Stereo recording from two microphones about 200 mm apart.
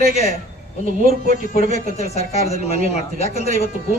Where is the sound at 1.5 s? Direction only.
35° left (ahead or behind).